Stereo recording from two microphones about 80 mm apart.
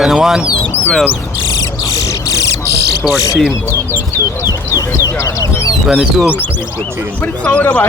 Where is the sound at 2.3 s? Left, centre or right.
Left.